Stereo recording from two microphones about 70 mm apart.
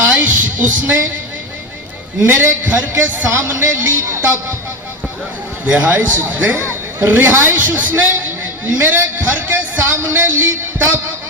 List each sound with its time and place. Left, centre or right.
0.0 s music: right
2.2 s a man's voice: right
5.6 s a man's voice: right